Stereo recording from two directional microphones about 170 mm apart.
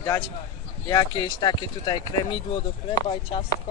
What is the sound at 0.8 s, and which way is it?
Speech, 25° left (ahead or behind).